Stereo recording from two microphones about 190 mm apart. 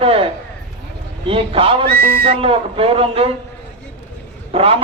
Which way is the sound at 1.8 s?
55° right (ahead or behind).